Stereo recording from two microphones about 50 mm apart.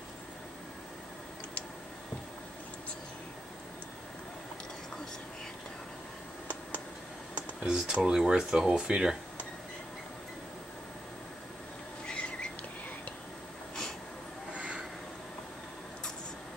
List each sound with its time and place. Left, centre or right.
7.6 s speech: centre
12.1 s rodents: centre
14.6 s a sound: centre